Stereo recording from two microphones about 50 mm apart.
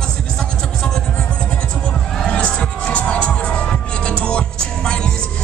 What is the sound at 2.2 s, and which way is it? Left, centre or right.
Music, left.